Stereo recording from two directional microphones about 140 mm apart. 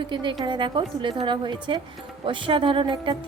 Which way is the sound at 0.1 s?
35° right (ahead or behind).